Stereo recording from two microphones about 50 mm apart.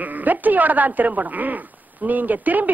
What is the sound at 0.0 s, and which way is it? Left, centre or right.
A man's voice, right.